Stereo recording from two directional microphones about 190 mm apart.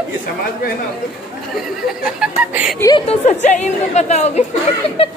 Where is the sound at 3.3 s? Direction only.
40° left (ahead or behind).